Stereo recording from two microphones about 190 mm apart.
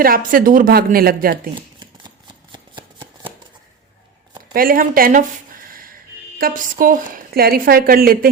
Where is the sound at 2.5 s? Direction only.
25° right (ahead or behind).